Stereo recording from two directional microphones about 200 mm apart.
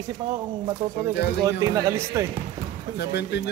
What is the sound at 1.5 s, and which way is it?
Speech, 15° right (ahead or behind).